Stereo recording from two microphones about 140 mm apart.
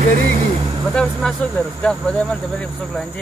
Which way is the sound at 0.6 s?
35° right (ahead or behind).